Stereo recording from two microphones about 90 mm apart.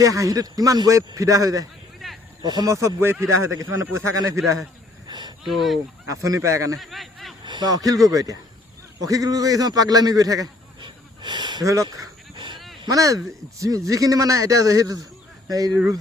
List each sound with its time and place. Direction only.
0.0 s speech: 40° right (ahead or behind)
2.0 s a sound: centre (ahead or behind)
2.4 s speech: 50° right (ahead or behind)
2.6 s speech: 35° right (ahead or behind)
5.0 s a sound: 55° right (ahead or behind)
5.5 s speech: centre (ahead or behind)
6.1 s speech: 40° right (ahead or behind)
6.7 s a sound: centre (ahead or behind)
7.4 s a man's voice: 55° right (ahead or behind)
10.8 s snort: 60° right (ahead or behind)
11.6 s speech: 35° right (ahead or behind)
12.4 s goose: 60° right (ahead or behind)
12.9 s speech: 40° right (ahead or behind)